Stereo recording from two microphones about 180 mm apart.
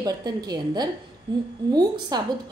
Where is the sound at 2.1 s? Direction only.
20° right (ahead or behind).